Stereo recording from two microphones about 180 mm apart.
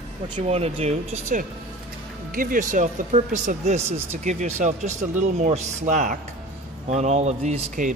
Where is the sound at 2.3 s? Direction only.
50° right (ahead or behind).